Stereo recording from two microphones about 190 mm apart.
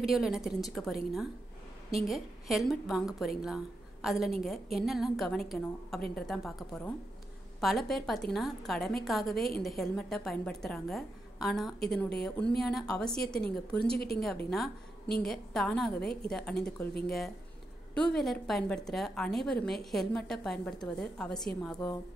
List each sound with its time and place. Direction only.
0.0 s a woman's voice: centre (ahead or behind)
13.9 s a woman's voice: 55° left (ahead or behind)
14.2 s a woman's voice: centre (ahead or behind)
17.9 s a woman's voice: 5° left (ahead or behind)